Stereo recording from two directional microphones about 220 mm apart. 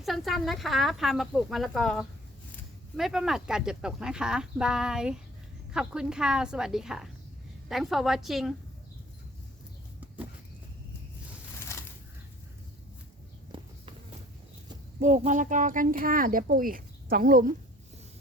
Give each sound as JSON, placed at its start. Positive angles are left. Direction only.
{"t": 0.0, "sound": "speech", "side_deg": 0}
{"t": 11.7, "sound": "a sound", "side_deg": 15}
{"t": 13.5, "sound": "walk", "side_deg": -20}
{"t": 14.9, "sound": "speech", "side_deg": -35}